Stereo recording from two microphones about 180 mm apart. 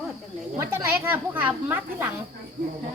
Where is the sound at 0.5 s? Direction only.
15° right (ahead or behind).